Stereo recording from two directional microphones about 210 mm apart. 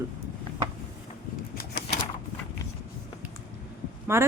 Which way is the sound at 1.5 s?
45° left (ahead or behind).